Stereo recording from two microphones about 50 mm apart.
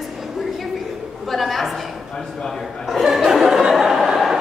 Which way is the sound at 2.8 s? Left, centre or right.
Centre.